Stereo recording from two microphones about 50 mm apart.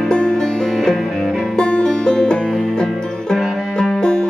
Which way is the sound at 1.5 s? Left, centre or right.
Centre.